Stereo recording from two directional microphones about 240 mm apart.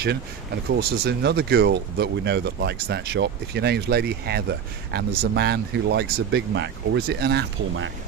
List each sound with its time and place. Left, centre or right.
0.8 s speech: right